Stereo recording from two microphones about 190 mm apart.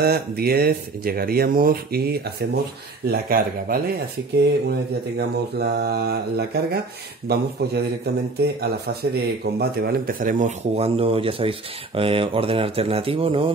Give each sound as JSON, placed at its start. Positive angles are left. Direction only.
{"t": 0.0, "sound": "a man's voice", "side_deg": -55}
{"t": 10.8, "sound": "speech", "side_deg": -30}